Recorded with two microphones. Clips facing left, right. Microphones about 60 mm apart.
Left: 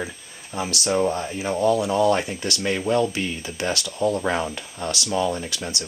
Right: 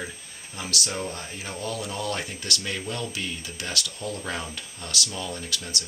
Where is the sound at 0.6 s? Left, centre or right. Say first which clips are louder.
Left 9 dB; left.